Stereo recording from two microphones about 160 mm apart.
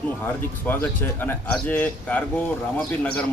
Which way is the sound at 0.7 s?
15° left (ahead or behind).